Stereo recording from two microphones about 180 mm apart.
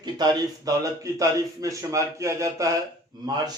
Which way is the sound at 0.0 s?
20° right (ahead or behind).